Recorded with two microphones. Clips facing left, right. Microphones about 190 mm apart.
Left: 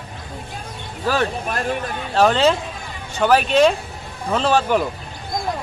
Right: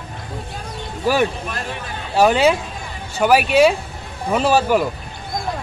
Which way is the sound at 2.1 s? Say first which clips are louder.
Right 1 dB; 10° right (ahead or behind).